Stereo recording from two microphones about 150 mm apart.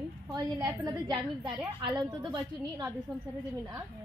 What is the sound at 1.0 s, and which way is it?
Speech, 30° right (ahead or behind).